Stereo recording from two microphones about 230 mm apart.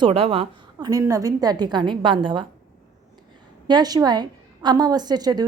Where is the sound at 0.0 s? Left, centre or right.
Right.